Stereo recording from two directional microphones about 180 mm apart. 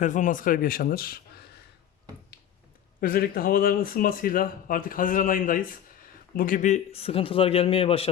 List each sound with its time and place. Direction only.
0.0 s speech: 45° left (ahead or behind)
3.0 s speech: 55° left (ahead or behind); by 8.0 s 30° left (ahead or behind)